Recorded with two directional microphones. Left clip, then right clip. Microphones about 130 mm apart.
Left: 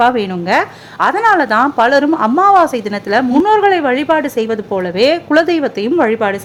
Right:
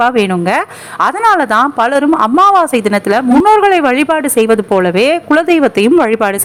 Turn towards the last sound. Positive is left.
turn(degrees=-45)  # may be behind; listen again after turning